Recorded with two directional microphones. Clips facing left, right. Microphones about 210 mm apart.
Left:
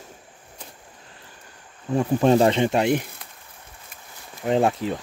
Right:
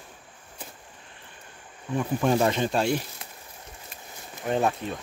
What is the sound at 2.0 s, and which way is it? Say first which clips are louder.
Speech: left 6 dB; 30° left (ahead or behind).